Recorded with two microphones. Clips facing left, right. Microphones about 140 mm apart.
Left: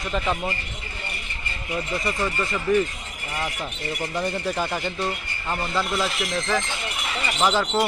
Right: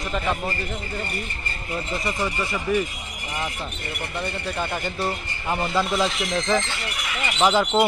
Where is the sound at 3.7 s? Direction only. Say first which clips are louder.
Left 3 dB; 60° right (ahead or behind).